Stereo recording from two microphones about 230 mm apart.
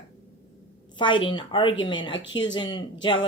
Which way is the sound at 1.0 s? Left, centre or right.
Left.